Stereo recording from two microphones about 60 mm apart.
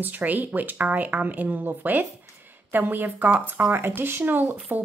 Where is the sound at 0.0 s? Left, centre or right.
Right.